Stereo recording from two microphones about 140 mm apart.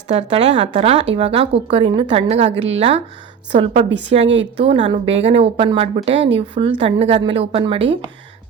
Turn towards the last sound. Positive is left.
turn(degrees=-40)  # may be behind; listen again after turning